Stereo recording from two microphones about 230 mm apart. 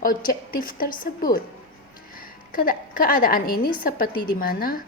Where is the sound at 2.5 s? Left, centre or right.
Left.